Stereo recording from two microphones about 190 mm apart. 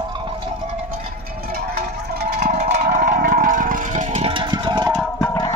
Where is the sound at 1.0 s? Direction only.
50° right (ahead or behind).